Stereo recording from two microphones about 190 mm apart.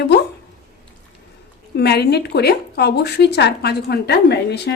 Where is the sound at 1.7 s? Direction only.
60° left (ahead or behind).